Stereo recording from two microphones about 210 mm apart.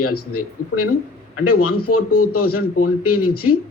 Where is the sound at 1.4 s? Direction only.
90° left.